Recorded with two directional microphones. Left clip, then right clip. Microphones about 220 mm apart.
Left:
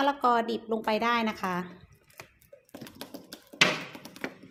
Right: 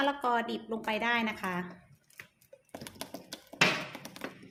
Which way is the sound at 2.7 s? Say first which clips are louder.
Even; 5° right (ahead or behind).